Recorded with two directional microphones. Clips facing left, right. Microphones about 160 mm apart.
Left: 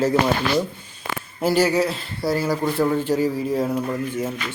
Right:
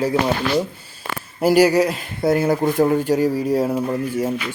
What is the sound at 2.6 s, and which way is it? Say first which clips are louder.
Speech: right 4 dB; 15° right (ahead or behind).